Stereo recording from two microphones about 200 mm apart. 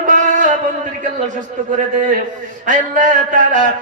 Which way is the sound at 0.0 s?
40° right (ahead or behind).